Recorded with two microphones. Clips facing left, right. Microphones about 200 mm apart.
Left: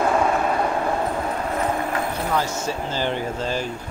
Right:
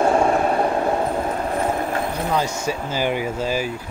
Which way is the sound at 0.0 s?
30° right (ahead or behind).